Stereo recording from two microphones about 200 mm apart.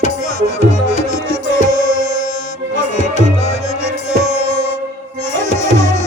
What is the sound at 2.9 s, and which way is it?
Music, 35° left (ahead or behind).